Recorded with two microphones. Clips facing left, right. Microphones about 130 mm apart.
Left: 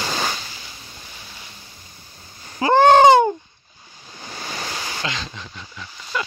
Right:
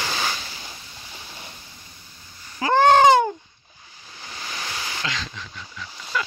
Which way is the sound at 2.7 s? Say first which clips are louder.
Left 3 dB; 25° left (ahead or behind).